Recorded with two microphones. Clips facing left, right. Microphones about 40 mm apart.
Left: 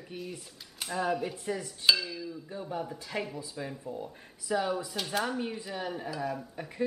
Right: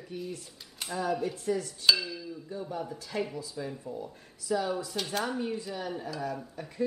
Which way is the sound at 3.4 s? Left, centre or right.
Left.